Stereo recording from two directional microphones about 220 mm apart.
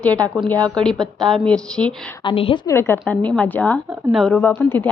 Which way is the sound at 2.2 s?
25° left (ahead or behind).